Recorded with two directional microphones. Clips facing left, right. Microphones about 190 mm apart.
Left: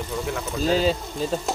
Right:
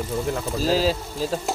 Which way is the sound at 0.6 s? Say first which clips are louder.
Left 1 dB; centre (ahead or behind).